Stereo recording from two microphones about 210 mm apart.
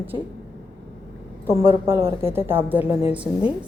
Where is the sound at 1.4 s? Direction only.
10° right (ahead or behind).